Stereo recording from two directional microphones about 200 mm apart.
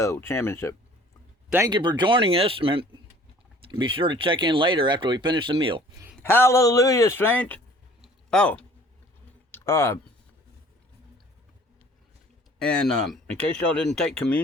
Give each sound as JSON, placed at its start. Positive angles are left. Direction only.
{"t": 0.0, "sound": "a man's voice", "side_deg": 15}
{"t": 1.5, "sound": "speech", "side_deg": -10}
{"t": 1.7, "sound": "speech", "side_deg": -25}
{"t": 6.2, "sound": "a man's voice", "side_deg": 10}
{"t": 8.0, "sound": "a sound", "side_deg": 5}
{"t": 9.5, "sound": "speech", "side_deg": 10}
{"t": 12.5, "sound": "speech", "side_deg": 5}